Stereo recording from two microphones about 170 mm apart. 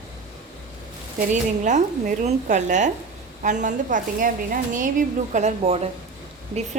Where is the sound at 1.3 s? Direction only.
45° right (ahead or behind).